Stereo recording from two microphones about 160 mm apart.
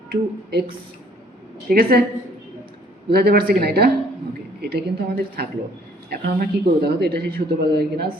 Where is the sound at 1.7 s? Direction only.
70° right (ahead or behind).